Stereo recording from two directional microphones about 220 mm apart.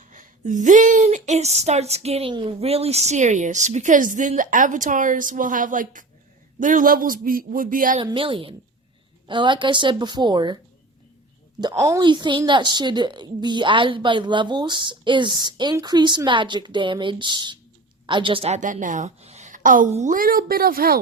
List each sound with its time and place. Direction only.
0.0 s speech: 35° right (ahead or behind)
7.9 s a woman's voice: 25° right (ahead or behind)
11.6 s a woman's voice: 15° right (ahead or behind); by 21.0 s 40° right (ahead or behind)